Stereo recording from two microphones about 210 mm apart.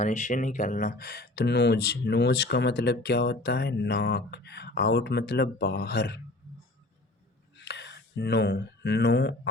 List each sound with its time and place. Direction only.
0.0 s speech: 35° left (ahead or behind); by 6.1 s 50° left (ahead or behind)
7.5 s speech: 55° left (ahead or behind)